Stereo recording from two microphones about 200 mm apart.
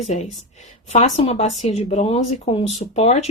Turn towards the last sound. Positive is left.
turn(degrees=30)  # may be behind; listen again after turning